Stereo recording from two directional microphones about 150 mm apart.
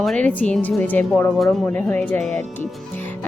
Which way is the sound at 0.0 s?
5° left (ahead or behind).